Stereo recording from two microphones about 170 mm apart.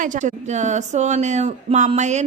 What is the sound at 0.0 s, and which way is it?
Speech, 50° right (ahead or behind).